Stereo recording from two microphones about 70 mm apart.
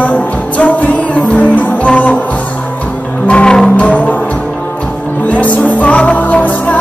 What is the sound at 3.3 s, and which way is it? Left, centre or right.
Music, centre.